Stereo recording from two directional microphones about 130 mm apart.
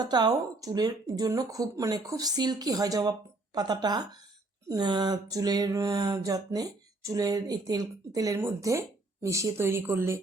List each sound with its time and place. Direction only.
0.0 s speech: 30° right (ahead or behind)